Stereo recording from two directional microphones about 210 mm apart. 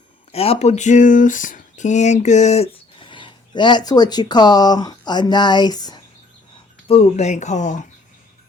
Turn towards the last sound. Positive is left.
turn(degrees=35)  # may be behind; listen again after turning